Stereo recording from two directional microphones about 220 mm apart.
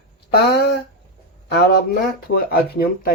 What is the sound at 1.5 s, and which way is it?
Speech, 45° left (ahead or behind).